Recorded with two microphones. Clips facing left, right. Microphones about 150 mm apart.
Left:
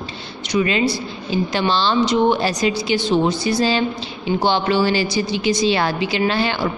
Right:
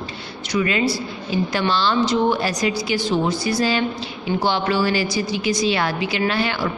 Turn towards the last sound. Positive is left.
turn(degrees=30)  # may be behind; listen again after turning